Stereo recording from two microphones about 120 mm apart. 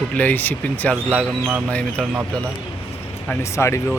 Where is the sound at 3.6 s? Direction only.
20° left (ahead or behind).